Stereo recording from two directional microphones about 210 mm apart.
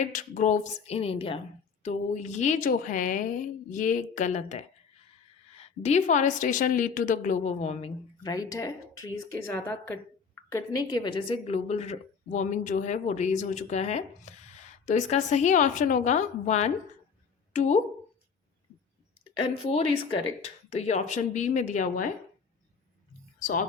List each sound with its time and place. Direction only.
0.0 s a woman's voice: 35° left (ahead or behind)
5.8 s a woman's voice: 35° left (ahead or behind)
19.4 s a woman's voice: 25° left (ahead or behind)
23.4 s speech: 35° left (ahead or behind)